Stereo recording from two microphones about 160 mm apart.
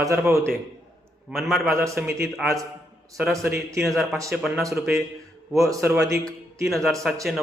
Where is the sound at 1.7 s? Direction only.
15° right (ahead or behind).